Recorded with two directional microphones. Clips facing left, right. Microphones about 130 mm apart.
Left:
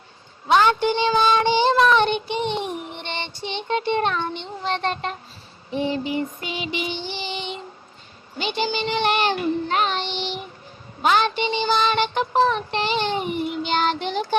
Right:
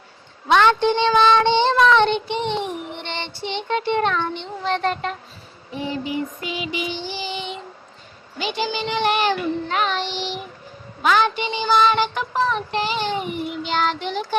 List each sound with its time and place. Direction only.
1.0 s child singing: 15° left (ahead or behind)
8.4 s child singing: 30° left (ahead or behind)